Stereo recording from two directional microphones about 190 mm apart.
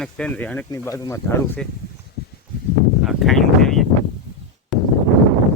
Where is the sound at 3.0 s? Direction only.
Centre (ahead or behind).